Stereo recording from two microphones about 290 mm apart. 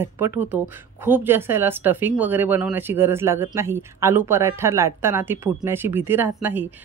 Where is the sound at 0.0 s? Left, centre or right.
Centre.